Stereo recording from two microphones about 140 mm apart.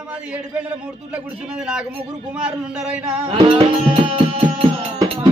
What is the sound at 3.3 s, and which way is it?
Music, 40° right (ahead or behind).